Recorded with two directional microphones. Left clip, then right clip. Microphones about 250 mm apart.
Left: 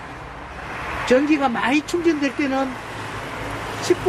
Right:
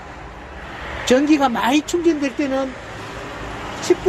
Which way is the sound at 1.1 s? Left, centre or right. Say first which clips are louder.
Right 2 dB; centre.